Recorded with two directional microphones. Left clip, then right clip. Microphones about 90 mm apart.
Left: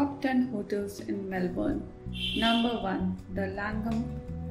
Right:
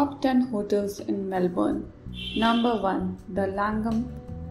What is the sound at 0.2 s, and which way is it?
Speech, 35° right (ahead or behind).